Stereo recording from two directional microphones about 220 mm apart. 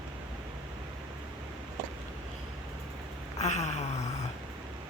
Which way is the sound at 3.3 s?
30° left (ahead or behind).